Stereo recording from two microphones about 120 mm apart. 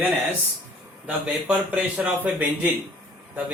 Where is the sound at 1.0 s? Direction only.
10° right (ahead or behind).